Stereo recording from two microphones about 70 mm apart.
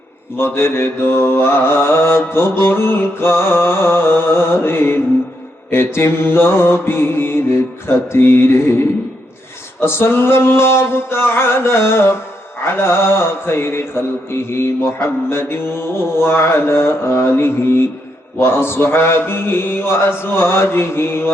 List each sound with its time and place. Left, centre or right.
0.3 s mantra: left